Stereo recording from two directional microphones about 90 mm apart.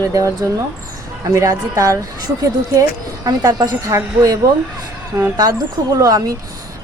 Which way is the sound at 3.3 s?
50° right (ahead or behind).